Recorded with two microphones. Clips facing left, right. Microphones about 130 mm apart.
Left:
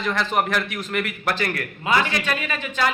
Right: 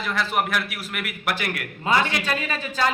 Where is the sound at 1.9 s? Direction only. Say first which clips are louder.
Even; 35° right (ahead or behind).